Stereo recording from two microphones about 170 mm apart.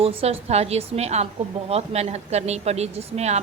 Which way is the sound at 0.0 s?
35° right (ahead or behind).